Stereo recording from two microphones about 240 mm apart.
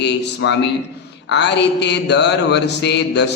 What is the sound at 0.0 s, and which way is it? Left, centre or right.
Speech, left.